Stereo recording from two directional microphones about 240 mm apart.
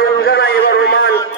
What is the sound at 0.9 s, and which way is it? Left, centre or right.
Speech, left.